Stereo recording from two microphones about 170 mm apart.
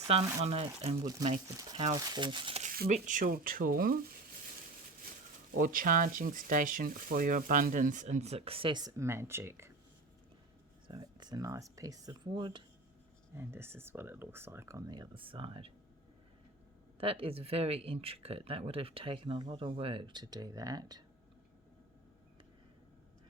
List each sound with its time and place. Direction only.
0.1 s speech: 35° right (ahead or behind)
1.2 s speech: 20° right (ahead or behind)
2.9 s speech: 50° right (ahead or behind)
5.5 s speech: 55° right (ahead or behind); by 9.7 s 15° right (ahead or behind)
10.8 s speech: 25° right (ahead or behind)
13.3 s speech: 15° right (ahead or behind); by 15.7 s 30° right (ahead or behind)
17.0 s speech: 35° right (ahead or behind)